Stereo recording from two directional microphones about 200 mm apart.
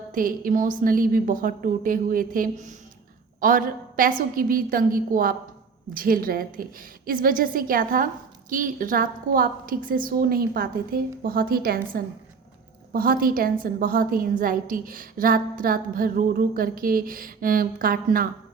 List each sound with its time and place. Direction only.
0.1 s a woman's voice: 45° right (ahead or behind)